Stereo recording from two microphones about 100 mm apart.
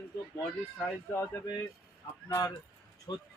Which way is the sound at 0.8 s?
25° left (ahead or behind).